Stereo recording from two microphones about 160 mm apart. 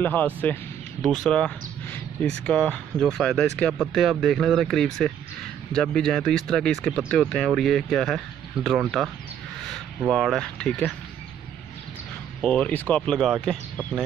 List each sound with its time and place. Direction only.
0.0 s speech: 10° left (ahead or behind)
12.4 s speech: 5° left (ahead or behind)